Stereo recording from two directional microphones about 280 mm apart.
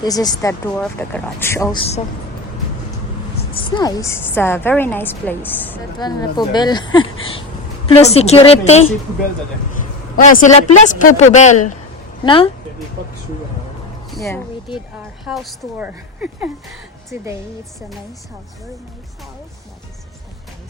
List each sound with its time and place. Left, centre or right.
0.0 s a woman's voice: centre
3.6 s a woman's voice: centre
10.2 s a woman's voice: left
14.2 s speech: centre
14.9 s a woman's voice: centre